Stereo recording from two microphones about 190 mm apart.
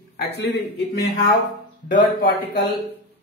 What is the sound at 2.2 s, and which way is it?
Speech, 55° left (ahead or behind).